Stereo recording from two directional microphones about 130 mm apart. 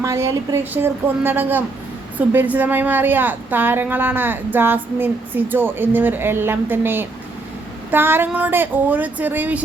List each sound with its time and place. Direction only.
0.0 s a woman's voice: 20° right (ahead or behind)